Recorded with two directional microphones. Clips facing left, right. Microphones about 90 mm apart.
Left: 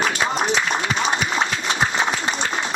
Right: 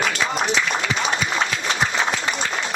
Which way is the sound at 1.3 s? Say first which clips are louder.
Left 1 dB; 30° left (ahead or behind).